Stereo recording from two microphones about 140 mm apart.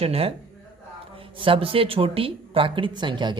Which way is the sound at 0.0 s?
45° right (ahead or behind).